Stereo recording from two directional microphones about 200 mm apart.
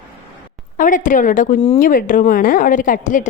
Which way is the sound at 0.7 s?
40° left (ahead or behind).